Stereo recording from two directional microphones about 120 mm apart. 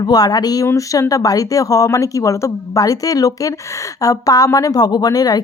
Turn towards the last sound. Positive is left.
turn(degrees=30)  # may be behind; listen again after turning